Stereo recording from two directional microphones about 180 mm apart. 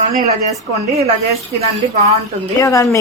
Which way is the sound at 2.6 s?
15° left (ahead or behind).